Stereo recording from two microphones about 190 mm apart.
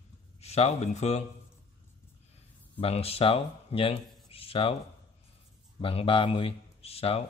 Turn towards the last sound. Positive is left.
turn(degrees=30)  # may be behind; listen again after turning